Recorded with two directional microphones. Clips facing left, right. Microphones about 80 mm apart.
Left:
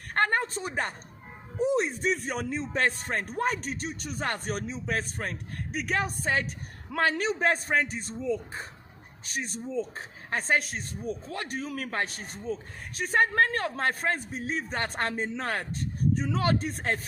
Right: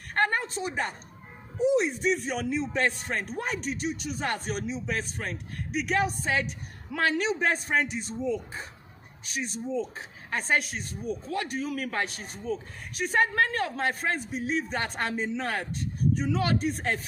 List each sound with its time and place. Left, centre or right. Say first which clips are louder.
0.1 s a sound: even; left
1.6 s speech: right 2 dB; left
9.2 s speech: right 1 dB; left